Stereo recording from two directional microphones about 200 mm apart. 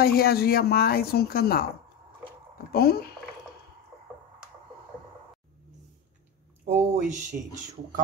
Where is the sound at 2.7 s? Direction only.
50° left (ahead or behind).